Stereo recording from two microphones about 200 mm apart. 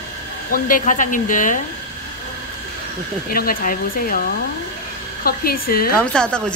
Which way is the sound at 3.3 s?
45° left (ahead or behind).